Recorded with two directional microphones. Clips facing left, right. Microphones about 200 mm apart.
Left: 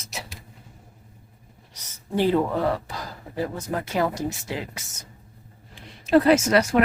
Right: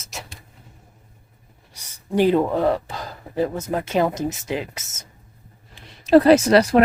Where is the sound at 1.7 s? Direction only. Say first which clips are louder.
Right 5 dB; 10° right (ahead or behind).